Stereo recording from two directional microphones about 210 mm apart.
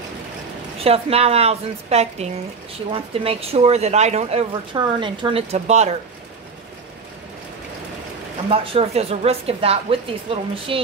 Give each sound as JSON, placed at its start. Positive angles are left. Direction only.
{"t": 0.8, "sound": "speech", "side_deg": -30}
{"t": 8.5, "sound": "speech", "side_deg": -30}